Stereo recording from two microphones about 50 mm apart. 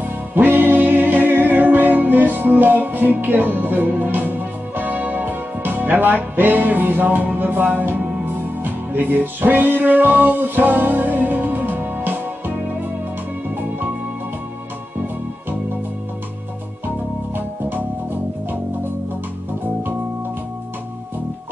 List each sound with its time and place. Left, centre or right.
0.3 s music: right